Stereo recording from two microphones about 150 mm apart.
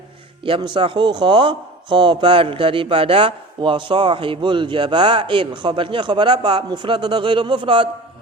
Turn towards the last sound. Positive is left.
turn(degrees=-35)  # may be behind; listen again after turning